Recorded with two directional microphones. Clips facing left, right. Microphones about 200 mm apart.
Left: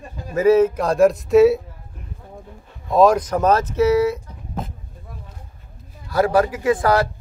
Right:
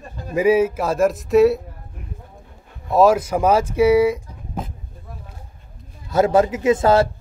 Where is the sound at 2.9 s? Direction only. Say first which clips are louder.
Even; 5° right (ahead or behind).